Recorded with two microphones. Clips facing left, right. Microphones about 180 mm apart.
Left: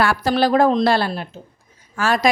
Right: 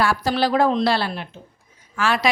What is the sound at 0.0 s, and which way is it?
A woman's voice, 60° left (ahead or behind).